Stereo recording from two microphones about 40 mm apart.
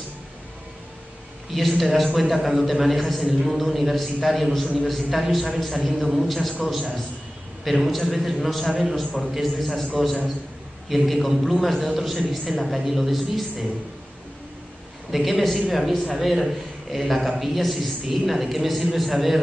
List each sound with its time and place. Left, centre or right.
1.5 s a man's voice: centre
10.9 s a man's voice: centre
15.0 s a man's voice: centre